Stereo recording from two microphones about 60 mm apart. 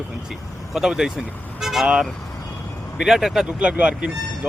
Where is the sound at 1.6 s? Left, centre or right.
Centre.